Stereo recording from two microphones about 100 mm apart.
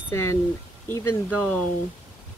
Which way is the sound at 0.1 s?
25° left (ahead or behind).